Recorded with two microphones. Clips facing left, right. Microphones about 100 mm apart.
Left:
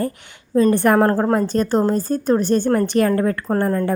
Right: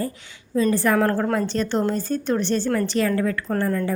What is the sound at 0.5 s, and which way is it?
A woman's voice, 55° left (ahead or behind).